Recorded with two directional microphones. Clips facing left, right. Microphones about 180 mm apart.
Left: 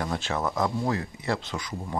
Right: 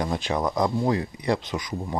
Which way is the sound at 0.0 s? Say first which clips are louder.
Right 3 dB; 15° right (ahead or behind).